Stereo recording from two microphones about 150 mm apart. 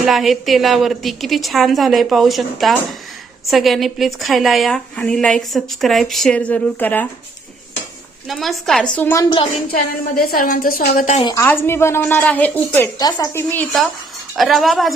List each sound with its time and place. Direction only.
0.0 s a woman's voice: centre (ahead or behind)
8.3 s a woman's voice: centre (ahead or behind)
9.7 s a woman's voice: 75° left (ahead or behind); by 11.2 s 55° left (ahead or behind)
11.2 s a woman's voice: 30° left (ahead or behind)
11.4 s a woman's voice: 15° left (ahead or behind)
13.0 s a woman's voice: 25° left (ahead or behind)
14.3 s a woman's voice: centre (ahead or behind)